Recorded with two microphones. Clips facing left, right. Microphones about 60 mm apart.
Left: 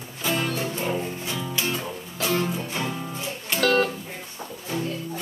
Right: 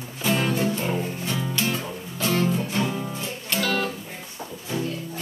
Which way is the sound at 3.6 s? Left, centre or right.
Left.